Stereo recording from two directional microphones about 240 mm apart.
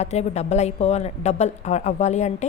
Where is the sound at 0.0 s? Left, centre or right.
Left.